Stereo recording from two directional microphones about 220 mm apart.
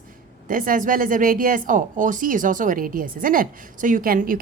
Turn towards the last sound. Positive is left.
turn(degrees=-40)  # may be behind; listen again after turning